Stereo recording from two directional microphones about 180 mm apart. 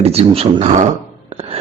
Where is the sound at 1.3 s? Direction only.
30° right (ahead or behind).